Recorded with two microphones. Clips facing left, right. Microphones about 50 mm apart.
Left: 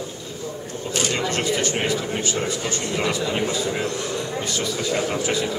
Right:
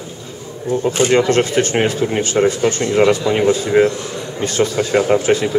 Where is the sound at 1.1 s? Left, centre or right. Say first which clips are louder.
Right 8 dB; right.